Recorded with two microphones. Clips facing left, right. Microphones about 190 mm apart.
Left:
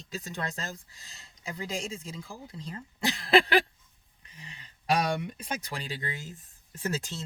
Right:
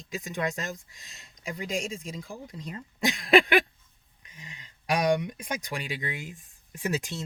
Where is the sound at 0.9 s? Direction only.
35° left (ahead or behind).